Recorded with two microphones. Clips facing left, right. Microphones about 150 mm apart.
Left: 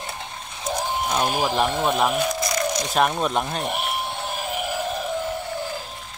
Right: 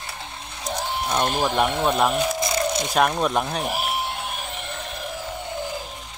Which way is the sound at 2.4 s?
25° right (ahead or behind).